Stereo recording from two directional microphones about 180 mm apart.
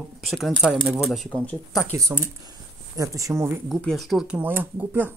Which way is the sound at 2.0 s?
20° right (ahead or behind).